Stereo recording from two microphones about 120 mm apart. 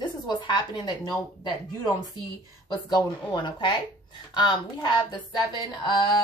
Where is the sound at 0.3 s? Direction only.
35° left (ahead or behind).